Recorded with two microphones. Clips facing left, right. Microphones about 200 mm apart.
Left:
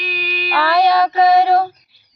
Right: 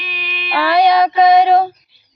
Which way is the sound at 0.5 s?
15° right (ahead or behind).